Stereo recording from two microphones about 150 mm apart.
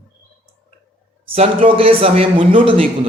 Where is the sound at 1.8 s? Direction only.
40° right (ahead or behind).